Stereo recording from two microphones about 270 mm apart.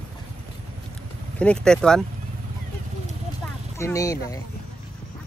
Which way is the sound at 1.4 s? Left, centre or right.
Centre.